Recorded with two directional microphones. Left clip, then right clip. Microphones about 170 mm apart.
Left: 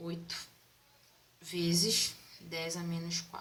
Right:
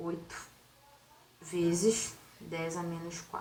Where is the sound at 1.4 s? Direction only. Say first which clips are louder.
Right 2 dB; 30° left (ahead or behind).